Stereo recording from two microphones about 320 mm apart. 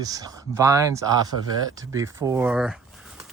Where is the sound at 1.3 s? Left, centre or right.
Left.